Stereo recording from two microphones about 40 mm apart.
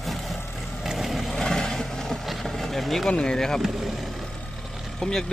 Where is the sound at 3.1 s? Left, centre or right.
Left.